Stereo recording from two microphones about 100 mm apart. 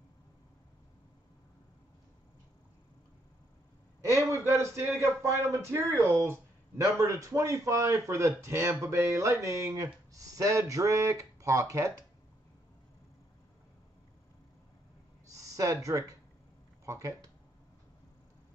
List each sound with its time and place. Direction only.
4.1 s speech: 30° right (ahead or behind)
15.2 s a sound: 35° right (ahead or behind)
16.8 s speech: 30° right (ahead or behind)